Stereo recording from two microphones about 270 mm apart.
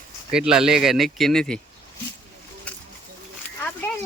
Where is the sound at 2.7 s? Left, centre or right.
Centre.